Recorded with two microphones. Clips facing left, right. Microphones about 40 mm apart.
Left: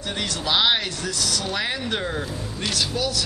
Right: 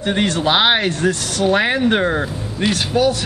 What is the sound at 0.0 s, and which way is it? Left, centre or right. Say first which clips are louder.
A man's voice: right 10 dB; right.